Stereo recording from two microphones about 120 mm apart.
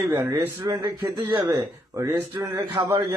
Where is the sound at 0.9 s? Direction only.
15° right (ahead or behind).